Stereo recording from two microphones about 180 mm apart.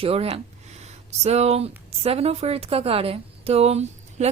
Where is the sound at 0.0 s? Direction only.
35° right (ahead or behind).